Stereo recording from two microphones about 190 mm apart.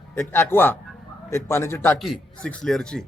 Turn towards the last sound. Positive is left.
turn(degrees=5)  # may be behind; listen again after turning